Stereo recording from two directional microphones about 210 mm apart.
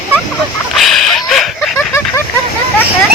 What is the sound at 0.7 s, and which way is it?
Speech, centre (ahead or behind).